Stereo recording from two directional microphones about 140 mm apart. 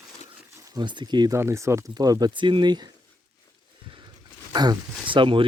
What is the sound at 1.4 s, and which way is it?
Speech, 20° right (ahead or behind).